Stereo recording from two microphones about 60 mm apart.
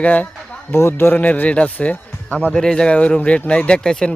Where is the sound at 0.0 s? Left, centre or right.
Left.